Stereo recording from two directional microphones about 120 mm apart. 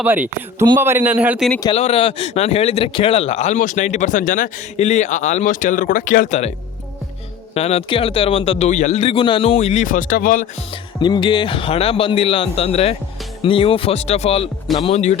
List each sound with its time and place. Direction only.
0.0 s a man's voice: 15° right (ahead or behind)
1.7 s speech: 60° left (ahead or behind); by 6.5 s 85° left
7.5 s a man's voice: 60° left (ahead or behind)
7.9 s speech: 50° left (ahead or behind)
9.6 s speech: 70° left (ahead or behind); by 10.5 s 90° left
11.0 s speech: 40° left (ahead or behind); by 14.5 s 55° left (ahead or behind)
14.9 s speech: 75° left (ahead or behind)